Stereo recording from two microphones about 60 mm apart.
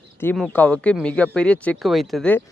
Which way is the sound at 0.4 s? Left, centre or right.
Left.